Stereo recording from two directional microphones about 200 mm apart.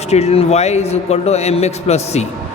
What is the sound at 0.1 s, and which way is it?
Speech, 30° left (ahead or behind).